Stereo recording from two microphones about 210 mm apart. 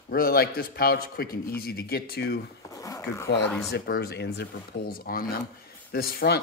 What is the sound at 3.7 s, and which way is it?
Speech, 50° left (ahead or behind).